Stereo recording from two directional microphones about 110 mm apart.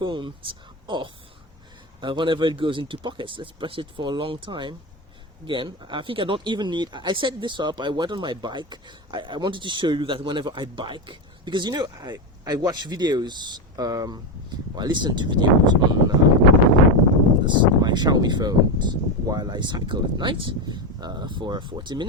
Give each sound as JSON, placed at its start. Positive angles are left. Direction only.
{"t": 0.0, "sound": "speech", "side_deg": -45}
{"t": 17.4, "sound": "speech", "side_deg": -45}